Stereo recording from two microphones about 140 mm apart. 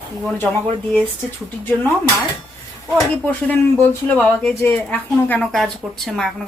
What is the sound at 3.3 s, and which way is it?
A woman's voice, 15° left (ahead or behind).